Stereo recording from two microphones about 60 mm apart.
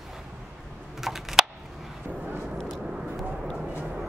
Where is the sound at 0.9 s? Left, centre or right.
Centre.